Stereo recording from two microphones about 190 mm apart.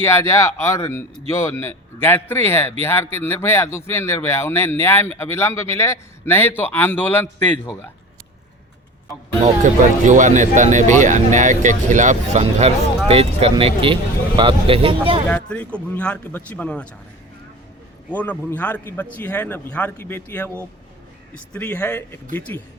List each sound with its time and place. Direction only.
0.0 s speech: 15° left (ahead or behind)
10.1 s speech: 40° right (ahead or behind)
15.3 s speech: 5° left (ahead or behind)
18.1 s speech: 10° left (ahead or behind)